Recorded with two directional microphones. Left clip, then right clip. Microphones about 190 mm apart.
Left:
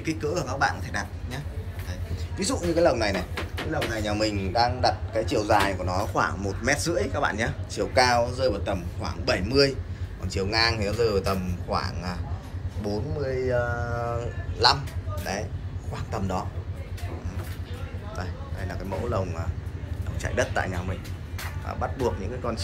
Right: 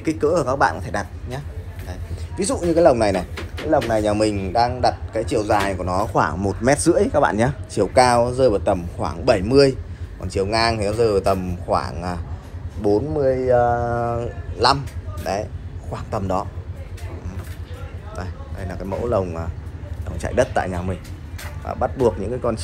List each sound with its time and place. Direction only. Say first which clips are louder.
0.0 s a man's voice: right 10 dB; 15° right (ahead or behind)
13.2 s a sound: right 8 dB; 30° right (ahead or behind)
13.6 s speech: right 10 dB; 10° right (ahead or behind)
14.0 s a man's voice: right 6 dB; 5° left (ahead or behind)
18.1 s a man's voice: right 3 dB; 5° left (ahead or behind)